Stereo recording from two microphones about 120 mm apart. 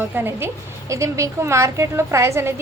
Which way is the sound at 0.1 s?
15° right (ahead or behind).